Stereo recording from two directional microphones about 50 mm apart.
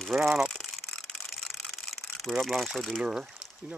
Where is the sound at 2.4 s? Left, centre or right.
Centre.